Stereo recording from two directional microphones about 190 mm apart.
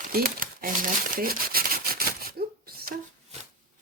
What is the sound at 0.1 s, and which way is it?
Crumpling, 50° right (ahead or behind).